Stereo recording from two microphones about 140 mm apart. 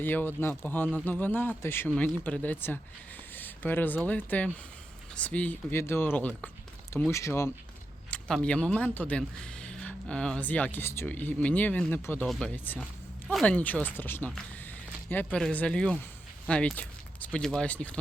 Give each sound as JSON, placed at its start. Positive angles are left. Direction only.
{"t": 0.0, "sound": "speech", "side_deg": 15}
{"t": 8.1, "sound": "speech", "side_deg": 10}